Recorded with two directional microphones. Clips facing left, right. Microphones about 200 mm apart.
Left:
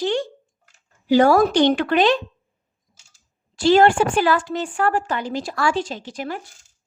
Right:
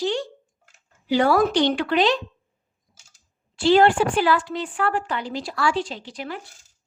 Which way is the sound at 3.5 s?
45° left (ahead or behind).